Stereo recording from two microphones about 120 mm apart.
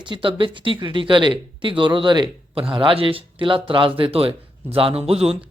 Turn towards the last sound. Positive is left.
turn(degrees=-60)  # may be behind; listen again after turning